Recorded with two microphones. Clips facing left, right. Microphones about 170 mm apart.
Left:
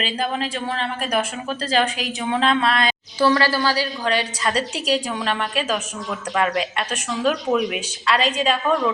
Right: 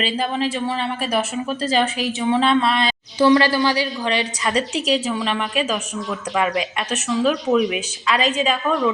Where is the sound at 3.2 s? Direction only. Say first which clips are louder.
Right 3 dB; 20° right (ahead or behind).